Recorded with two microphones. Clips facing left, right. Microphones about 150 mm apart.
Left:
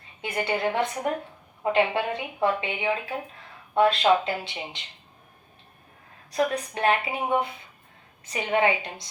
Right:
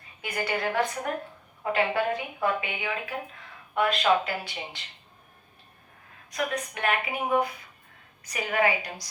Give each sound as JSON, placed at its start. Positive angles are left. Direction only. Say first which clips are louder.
{"t": 0.2, "sound": "speech", "louder": "left 3 dB", "side_deg": 25}
{"t": 6.3, "sound": "speech", "louder": "left 5 dB", "side_deg": 30}